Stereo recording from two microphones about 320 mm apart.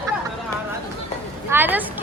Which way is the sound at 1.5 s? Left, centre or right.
Centre.